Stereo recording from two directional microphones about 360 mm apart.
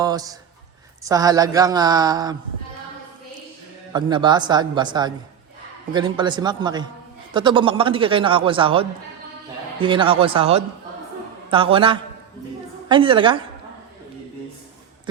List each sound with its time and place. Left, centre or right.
0.0 s a man's voice: centre
3.9 s a man's voice: centre